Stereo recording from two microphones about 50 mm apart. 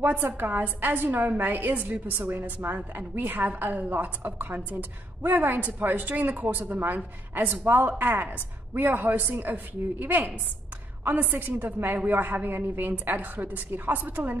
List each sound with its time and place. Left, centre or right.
0.0 s a woman's voice: right